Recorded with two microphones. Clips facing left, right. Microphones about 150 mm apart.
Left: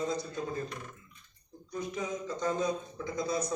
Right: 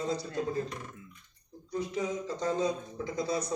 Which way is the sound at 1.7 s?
30° right (ahead or behind).